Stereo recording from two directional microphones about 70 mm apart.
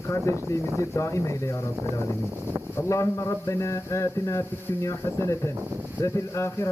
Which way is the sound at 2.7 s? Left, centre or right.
Left.